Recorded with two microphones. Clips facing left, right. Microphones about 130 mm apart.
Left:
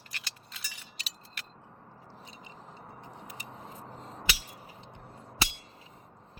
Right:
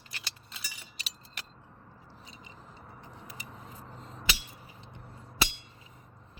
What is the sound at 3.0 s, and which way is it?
Vehicle, 35° right (ahead or behind).